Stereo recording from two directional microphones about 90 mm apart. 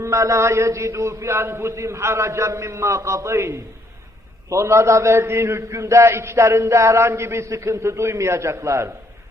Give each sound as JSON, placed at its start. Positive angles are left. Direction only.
{"t": 0.0, "sound": "a man's voice", "side_deg": -35}